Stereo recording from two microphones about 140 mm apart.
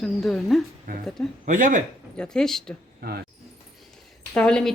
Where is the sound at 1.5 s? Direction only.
70° right (ahead or behind).